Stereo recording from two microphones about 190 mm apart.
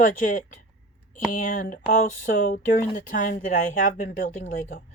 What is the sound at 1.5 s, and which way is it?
Speech, 45° left (ahead or behind).